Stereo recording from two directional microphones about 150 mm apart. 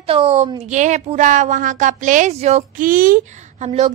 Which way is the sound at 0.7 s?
55° right (ahead or behind).